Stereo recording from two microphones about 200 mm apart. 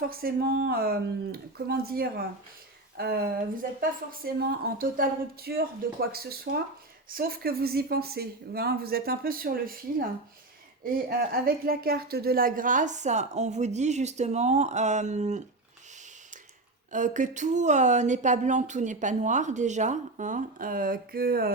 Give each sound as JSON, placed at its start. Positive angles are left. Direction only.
{"t": 0.0, "sound": "a woman's voice", "side_deg": -50}
{"t": 16.9, "sound": "speech", "side_deg": -40}